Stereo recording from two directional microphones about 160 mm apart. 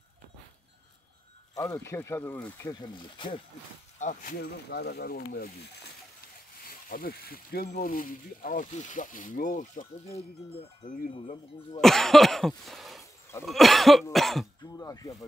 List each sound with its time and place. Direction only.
1.5 s speech: 20° left (ahead or behind)
2.7 s speech: 30° left (ahead or behind)
4.0 s speech: 55° left (ahead or behind)
6.6 s speech: 65° left (ahead or behind)
11.8 s cough: centre (ahead or behind)
14.6 s speech: 20° left (ahead or behind)